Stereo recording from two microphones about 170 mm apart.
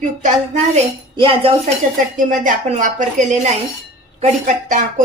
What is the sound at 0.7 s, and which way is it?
Speech, 30° right (ahead or behind).